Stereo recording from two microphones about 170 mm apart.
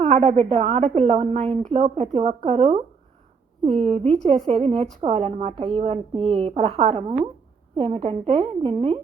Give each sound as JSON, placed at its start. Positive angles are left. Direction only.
{"t": 0.3, "sound": "a woman's voice", "side_deg": -40}